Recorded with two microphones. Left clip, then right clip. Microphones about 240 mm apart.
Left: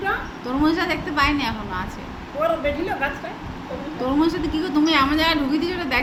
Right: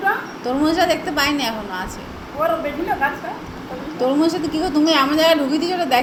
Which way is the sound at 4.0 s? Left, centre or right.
Centre.